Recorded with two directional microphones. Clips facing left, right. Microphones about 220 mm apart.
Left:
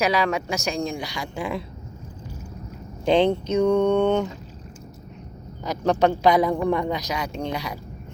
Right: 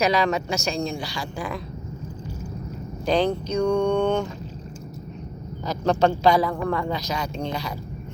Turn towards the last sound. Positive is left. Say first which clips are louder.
# even
turn(degrees=15)  # may be behind; listen again after turning